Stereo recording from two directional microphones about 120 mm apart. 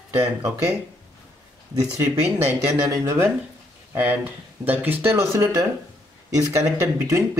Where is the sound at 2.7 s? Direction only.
25° right (ahead or behind).